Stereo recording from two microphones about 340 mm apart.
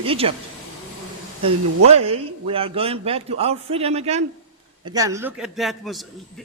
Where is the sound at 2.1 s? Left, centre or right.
Centre.